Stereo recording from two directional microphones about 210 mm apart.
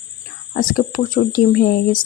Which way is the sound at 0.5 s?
40° left (ahead or behind).